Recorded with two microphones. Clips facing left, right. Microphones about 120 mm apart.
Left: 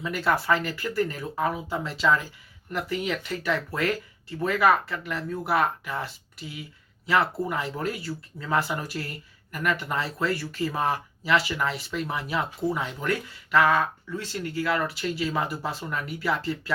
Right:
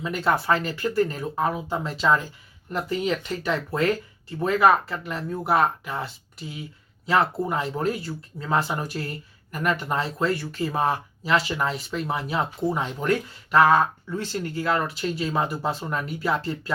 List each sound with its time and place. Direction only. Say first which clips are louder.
0.0 s speech: right 2 dB; 25° right (ahead or behind)
7.1 s speech: right 2 dB; 25° right (ahead or behind)